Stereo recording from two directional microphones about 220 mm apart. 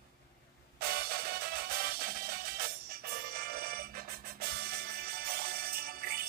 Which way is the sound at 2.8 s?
45° right (ahead or behind).